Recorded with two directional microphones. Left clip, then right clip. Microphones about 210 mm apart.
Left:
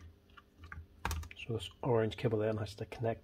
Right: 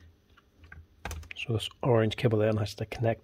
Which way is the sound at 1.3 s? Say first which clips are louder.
Right 8 dB; 50° right (ahead or behind).